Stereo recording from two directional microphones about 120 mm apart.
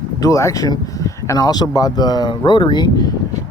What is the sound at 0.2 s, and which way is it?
Speech, 25° left (ahead or behind).